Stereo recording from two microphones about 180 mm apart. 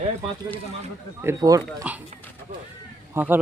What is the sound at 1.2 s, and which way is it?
Speech, 15° right (ahead or behind).